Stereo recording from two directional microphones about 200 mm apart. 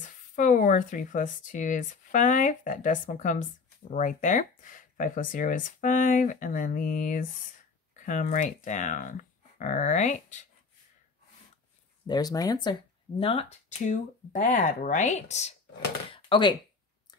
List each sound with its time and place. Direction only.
0.0 s speech: 40° left (ahead or behind)
12.1 s speech: 20° left (ahead or behind); by 15.5 s 35° left (ahead or behind)
16.1 s a sound: 25° left (ahead or behind)